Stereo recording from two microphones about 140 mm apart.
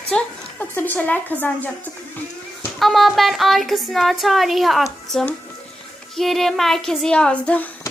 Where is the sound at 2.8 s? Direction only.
Centre (ahead or behind).